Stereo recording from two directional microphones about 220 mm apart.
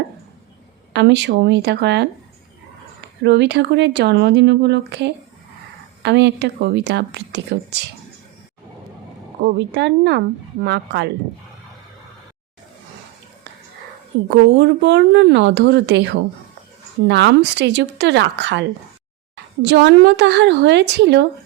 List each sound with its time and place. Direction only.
0.9 s speech: 50° right (ahead or behind)
3.2 s speech: 50° right (ahead or behind)
9.4 s speech: 50° right (ahead or behind)
14.3 s speech: 50° right (ahead or behind)
19.6 s speech: 50° right (ahead or behind)